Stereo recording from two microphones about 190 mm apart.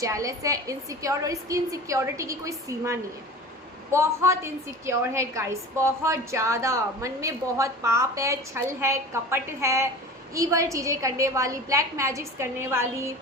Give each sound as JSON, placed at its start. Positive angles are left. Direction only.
{"t": 0.0, "sound": "a woman's voice", "side_deg": -15}